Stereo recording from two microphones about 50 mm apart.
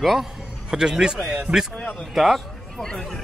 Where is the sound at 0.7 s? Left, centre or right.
Centre.